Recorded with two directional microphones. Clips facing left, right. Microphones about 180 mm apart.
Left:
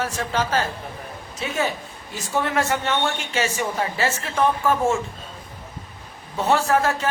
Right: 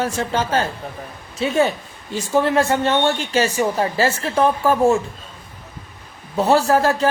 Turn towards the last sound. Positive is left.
turn(degrees=-35)  # may be behind; listen again after turning